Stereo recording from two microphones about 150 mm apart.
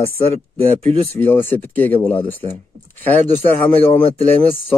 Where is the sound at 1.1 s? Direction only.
15° left (ahead or behind).